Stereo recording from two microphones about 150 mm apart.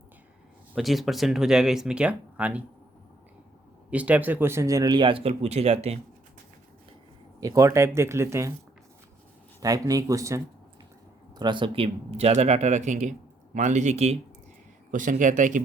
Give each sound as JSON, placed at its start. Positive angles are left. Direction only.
{"t": 0.7, "sound": "speech", "side_deg": 0}
{"t": 3.8, "sound": "speech", "side_deg": -10}
{"t": 7.3, "sound": "speech", "side_deg": -25}
{"t": 9.6, "sound": "speech", "side_deg": -25}
{"t": 11.3, "sound": "speech", "side_deg": -30}
{"t": 14.9, "sound": "speech", "side_deg": -60}